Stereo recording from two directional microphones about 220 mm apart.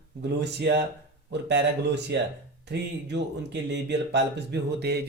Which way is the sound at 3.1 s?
50° right (ahead or behind).